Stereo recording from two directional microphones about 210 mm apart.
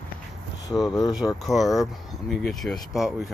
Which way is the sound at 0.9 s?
20° left (ahead or behind).